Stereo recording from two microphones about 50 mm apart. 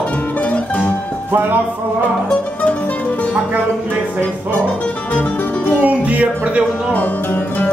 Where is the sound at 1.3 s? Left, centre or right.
Right.